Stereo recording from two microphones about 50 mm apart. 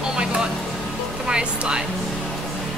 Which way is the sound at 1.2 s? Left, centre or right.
Centre.